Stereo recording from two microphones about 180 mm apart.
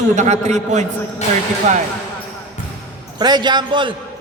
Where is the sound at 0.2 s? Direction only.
40° right (ahead or behind).